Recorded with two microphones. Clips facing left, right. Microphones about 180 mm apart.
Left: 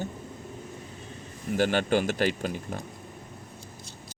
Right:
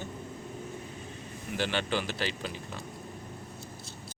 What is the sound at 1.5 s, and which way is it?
Speech, 45° left (ahead or behind).